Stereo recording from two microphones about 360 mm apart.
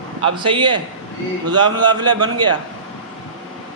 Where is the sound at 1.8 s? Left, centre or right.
Centre.